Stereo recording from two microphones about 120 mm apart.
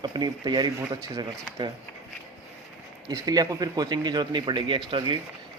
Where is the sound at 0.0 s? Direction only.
35° right (ahead or behind).